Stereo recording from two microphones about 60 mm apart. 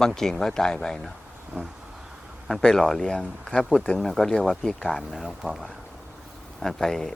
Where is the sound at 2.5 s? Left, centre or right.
Centre.